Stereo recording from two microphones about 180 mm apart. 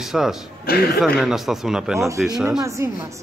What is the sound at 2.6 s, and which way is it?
Speech, 15° right (ahead or behind).